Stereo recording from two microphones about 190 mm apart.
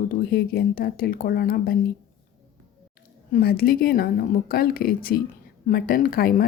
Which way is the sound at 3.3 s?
50° left (ahead or behind).